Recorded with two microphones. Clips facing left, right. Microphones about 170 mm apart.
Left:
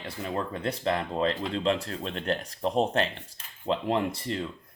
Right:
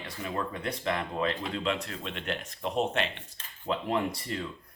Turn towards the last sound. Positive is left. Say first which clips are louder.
# left 2 dB
turn(degrees=30)  # may be behind; listen again after turning